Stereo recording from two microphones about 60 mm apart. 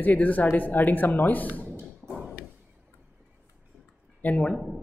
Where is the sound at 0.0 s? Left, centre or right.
Left.